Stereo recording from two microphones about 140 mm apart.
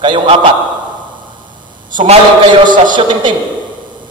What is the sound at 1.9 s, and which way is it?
A man's voice, 40° right (ahead or behind).